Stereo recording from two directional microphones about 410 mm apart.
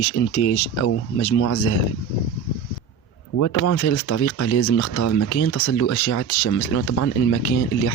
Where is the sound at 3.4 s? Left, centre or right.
Left.